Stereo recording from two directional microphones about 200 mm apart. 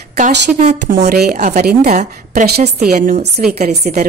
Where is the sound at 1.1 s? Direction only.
50° right (ahead or behind).